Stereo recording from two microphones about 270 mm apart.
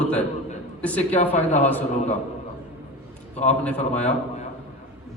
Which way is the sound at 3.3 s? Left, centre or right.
Left.